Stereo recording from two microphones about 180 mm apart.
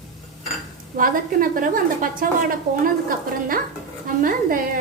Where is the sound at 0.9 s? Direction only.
50° right (ahead or behind).